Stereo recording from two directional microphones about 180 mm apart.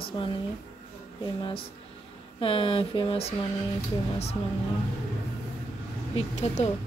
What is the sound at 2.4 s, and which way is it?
Speech, 30° left (ahead or behind).